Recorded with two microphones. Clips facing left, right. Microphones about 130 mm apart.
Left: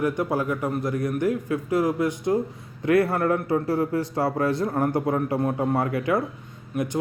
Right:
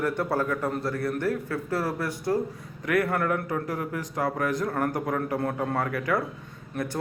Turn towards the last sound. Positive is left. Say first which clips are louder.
# left 4 dB
turn(degrees=10)  # may be behind; listen again after turning